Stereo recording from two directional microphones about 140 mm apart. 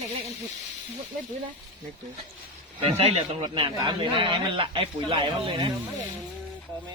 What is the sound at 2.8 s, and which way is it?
Speech, 50° right (ahead or behind).